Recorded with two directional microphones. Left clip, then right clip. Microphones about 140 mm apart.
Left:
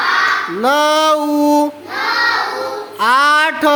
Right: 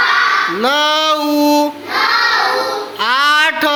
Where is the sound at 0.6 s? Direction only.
45° left (ahead or behind).